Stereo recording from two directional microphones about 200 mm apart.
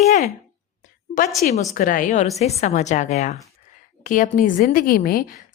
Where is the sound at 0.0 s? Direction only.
35° left (ahead or behind).